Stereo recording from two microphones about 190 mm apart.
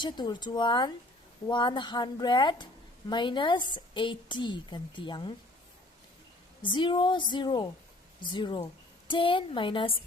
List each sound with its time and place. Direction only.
0.0 s a woman's voice: 25° left (ahead or behind)
6.6 s a woman's voice: 25° left (ahead or behind)